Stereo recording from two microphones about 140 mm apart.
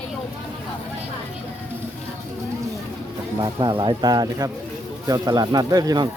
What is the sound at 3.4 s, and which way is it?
Speech, 30° right (ahead or behind).